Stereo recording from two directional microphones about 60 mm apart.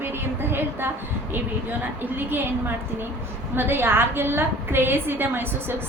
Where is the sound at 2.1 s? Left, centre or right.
Right.